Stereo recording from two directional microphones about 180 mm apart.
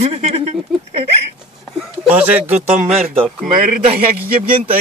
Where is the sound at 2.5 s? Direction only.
35° right (ahead or behind).